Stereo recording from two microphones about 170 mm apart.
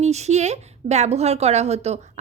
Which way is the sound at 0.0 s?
40° right (ahead or behind).